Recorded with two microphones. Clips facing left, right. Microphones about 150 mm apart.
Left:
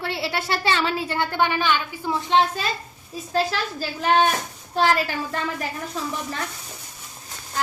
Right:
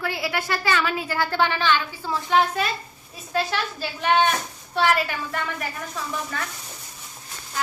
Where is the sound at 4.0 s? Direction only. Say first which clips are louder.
Left 1 dB; 35° left (ahead or behind).